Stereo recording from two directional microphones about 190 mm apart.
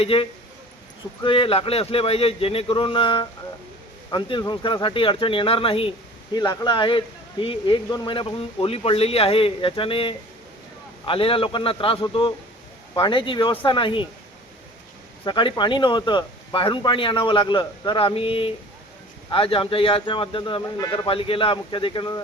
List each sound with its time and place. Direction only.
0.0 s speech: 30° left (ahead or behind)
15.2 s speech: 25° left (ahead or behind)